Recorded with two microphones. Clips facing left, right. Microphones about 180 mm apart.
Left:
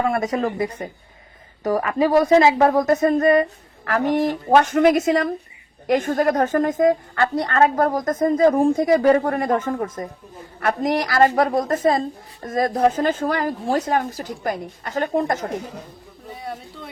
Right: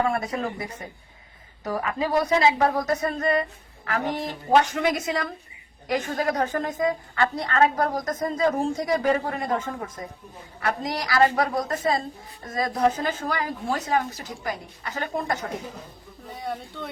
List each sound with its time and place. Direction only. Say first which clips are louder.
0.1 s a woman's voice: left 6 dB; 45° left (ahead or behind)
8.5 s a woman's voice: left 8 dB; 55° left (ahead or behind)
16.4 s speech: right 2 dB; 5° left (ahead or behind)